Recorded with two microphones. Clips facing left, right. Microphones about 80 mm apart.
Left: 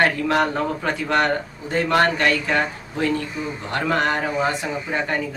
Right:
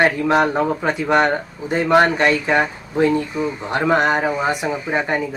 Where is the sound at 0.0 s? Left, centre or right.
Right.